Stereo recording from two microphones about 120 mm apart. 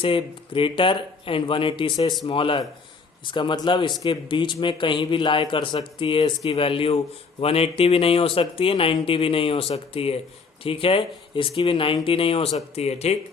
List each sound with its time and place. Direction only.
0.0 s speech: 45° left (ahead or behind); by 13.1 s 65° left (ahead or behind)